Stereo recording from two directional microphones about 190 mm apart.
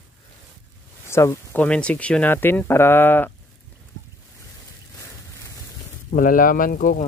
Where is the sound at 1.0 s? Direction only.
15° left (ahead or behind).